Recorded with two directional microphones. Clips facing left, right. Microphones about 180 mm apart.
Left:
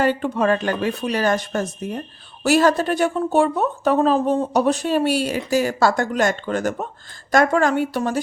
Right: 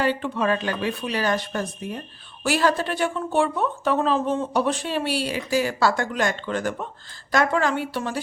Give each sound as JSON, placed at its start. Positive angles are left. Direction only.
{"t": 0.0, "sound": "speech", "side_deg": 45}